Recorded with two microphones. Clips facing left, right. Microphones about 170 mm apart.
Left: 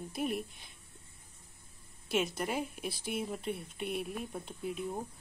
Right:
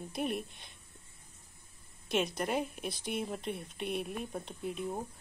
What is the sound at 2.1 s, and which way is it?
A woman's voice, 5° left (ahead or behind).